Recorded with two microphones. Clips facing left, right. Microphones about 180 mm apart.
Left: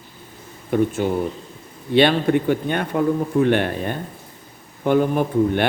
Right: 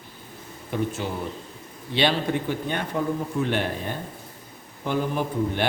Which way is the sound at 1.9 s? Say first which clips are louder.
Left 7 dB; 55° left (ahead or behind).